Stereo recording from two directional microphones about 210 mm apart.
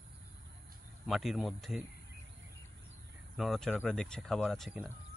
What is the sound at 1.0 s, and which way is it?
Speech, centre (ahead or behind).